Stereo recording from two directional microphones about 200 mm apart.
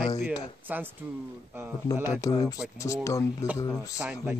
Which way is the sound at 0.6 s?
10° right (ahead or behind).